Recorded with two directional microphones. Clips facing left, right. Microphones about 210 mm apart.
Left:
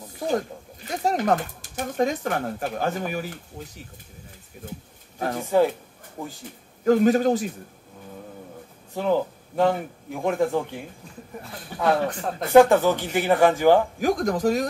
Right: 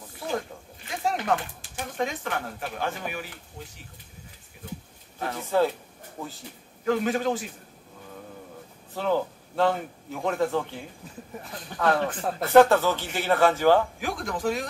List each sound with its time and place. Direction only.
0.0 s speech: 40° left (ahead or behind)
5.4 s speech: 15° left (ahead or behind)
6.8 s speech: 40° left (ahead or behind)
8.9 s speech: 15° left (ahead or behind)
12.1 s speech: 5° right (ahead or behind)
12.4 s speech: 15° left (ahead or behind)
13.9 s speech: 40° left (ahead or behind)